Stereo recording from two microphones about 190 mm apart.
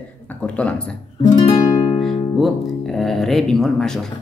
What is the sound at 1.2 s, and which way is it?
Music, 20° left (ahead or behind).